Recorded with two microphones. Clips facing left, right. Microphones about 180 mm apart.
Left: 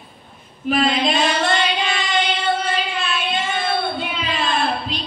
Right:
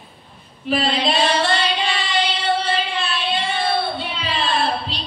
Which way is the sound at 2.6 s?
35° right (ahead or behind).